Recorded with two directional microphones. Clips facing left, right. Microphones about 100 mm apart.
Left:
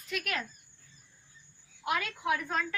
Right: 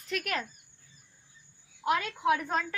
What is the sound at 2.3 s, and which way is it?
Speech, 25° right (ahead or behind).